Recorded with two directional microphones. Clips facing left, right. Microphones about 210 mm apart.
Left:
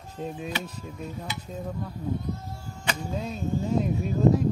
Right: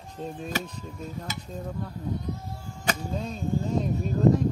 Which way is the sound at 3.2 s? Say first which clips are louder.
Even; 5° left (ahead or behind).